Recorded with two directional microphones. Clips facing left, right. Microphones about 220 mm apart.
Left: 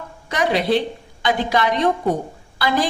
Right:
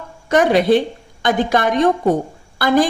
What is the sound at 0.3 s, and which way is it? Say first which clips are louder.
Speech: right 6 dB; 50° right (ahead or behind).